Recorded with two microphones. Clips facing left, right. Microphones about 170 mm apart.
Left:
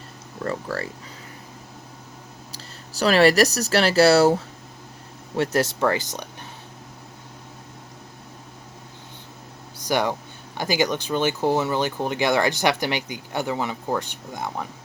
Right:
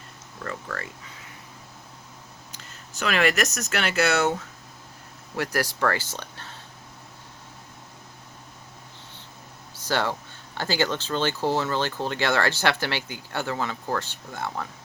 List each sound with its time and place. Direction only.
0.4 s speech: 35° left (ahead or behind)
2.5 s speech: 35° left (ahead or behind)
5.4 s speech: 25° left (ahead or behind)
9.7 s speech: 15° left (ahead or behind)